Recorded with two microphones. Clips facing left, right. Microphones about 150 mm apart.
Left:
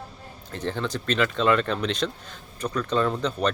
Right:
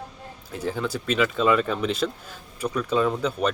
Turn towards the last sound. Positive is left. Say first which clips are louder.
# right 1 dB
turn(degrees=-5)  # may be behind; listen again after turning